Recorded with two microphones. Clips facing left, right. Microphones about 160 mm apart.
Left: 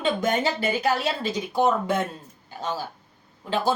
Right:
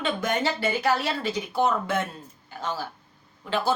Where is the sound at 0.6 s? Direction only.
15° left (ahead or behind).